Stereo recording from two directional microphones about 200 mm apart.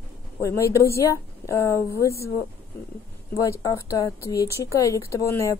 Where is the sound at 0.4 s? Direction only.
15° left (ahead or behind).